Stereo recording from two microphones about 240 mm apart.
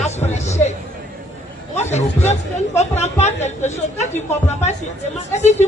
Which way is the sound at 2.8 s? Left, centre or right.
Left.